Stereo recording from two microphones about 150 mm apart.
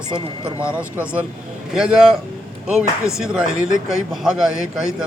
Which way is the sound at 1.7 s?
5° right (ahead or behind).